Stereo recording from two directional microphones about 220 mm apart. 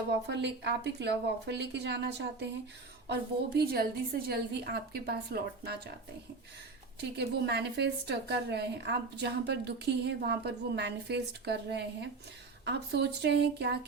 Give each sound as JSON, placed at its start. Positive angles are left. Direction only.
{"t": 0.1, "sound": "a woman's voice", "side_deg": -50}
{"t": 7.2, "sound": "a woman's voice", "side_deg": -50}